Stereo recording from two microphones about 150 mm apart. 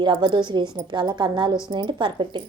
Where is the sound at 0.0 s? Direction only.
30° right (ahead or behind).